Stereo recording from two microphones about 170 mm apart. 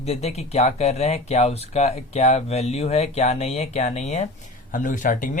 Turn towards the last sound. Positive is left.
turn(degrees=50)  # may be behind; listen again after turning